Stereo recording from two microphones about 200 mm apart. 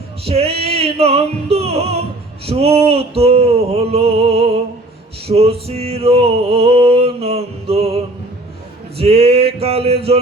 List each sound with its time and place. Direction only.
0.3 s music: 30° right (ahead or behind)
9.0 s music: 30° right (ahead or behind)